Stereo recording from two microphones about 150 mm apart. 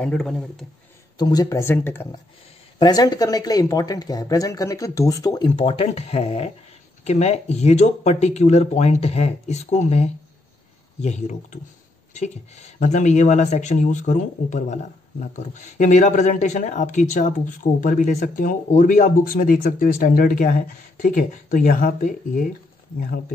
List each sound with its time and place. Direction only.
0.0 s speech: 5° left (ahead or behind)
1.1 s speech: 25° left (ahead or behind)
2.8 s speech: 25° left (ahead or behind)
5.5 s speech: 40° left (ahead or behind); by 22.5 s 65° left (ahead or behind)